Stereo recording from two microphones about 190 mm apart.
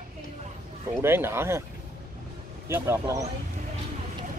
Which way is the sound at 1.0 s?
10° right (ahead or behind).